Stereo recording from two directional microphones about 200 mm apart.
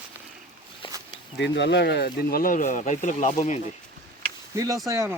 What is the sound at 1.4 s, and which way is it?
Speech, 60° left (ahead or behind).